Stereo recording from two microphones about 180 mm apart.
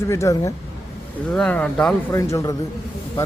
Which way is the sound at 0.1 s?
15° left (ahead or behind).